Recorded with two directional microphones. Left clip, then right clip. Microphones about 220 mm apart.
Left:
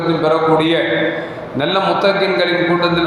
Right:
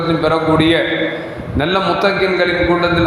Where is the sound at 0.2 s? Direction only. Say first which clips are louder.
Left 1 dB; 55° right (ahead or behind).